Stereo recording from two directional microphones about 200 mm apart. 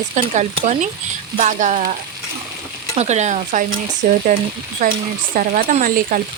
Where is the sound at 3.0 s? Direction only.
35° right (ahead or behind).